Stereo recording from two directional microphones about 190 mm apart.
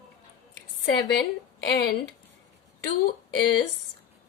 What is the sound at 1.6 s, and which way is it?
Speech, 55° left (ahead or behind).